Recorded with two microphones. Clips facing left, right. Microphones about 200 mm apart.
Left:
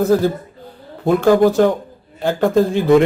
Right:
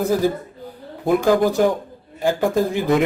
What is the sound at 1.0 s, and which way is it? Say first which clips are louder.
Speech: left 4 dB; 15° right (ahead or behind).